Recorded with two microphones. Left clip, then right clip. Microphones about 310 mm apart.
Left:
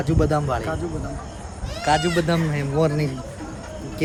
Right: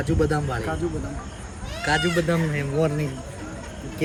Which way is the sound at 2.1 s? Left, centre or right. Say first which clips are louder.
Left 1 dB; left.